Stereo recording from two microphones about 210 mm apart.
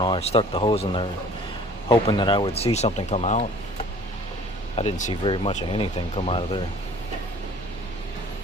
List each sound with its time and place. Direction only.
0.0 s speech: 25° left (ahead or behind)
4.8 s speech: 35° left (ahead or behind)